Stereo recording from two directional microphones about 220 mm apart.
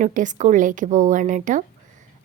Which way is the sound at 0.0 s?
35° right (ahead or behind).